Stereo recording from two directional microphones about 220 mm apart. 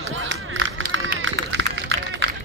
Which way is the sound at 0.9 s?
60° right (ahead or behind).